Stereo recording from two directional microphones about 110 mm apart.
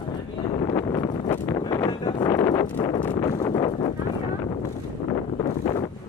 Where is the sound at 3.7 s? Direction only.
60° left (ahead or behind).